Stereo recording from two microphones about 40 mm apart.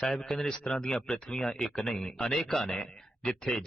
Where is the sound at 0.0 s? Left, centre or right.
Centre.